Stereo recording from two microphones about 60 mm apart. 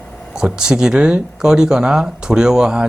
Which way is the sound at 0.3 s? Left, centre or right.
Centre.